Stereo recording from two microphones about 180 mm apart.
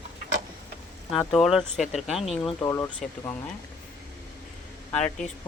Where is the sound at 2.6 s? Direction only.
15° left (ahead or behind).